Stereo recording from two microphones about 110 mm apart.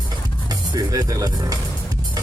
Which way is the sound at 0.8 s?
30° right (ahead or behind).